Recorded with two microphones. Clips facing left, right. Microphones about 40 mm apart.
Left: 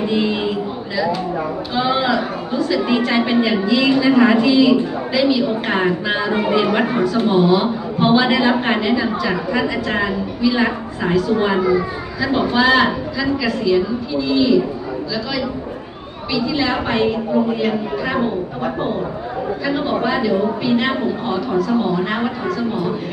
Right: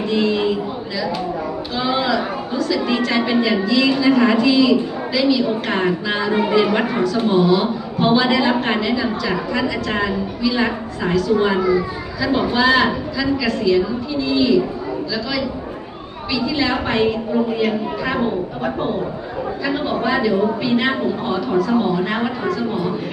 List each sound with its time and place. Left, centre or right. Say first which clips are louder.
0.1 s a sound: right 5 dB; centre
1.7 s a woman's voice: left 2 dB; centre
16.3 s a woman's voice: left 1 dB; centre